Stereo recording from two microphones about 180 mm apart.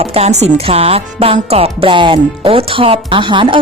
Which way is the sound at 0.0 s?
35° right (ahead or behind).